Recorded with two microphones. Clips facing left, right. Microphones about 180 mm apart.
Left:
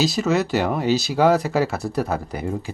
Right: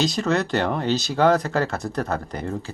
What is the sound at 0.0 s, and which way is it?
Speech, 5° left (ahead or behind).